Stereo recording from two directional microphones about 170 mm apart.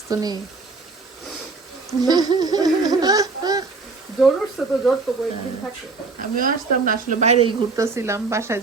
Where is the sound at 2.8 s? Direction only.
25° right (ahead or behind).